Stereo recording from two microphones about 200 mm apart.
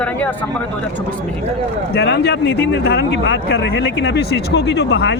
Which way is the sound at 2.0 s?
55° left (ahead or behind).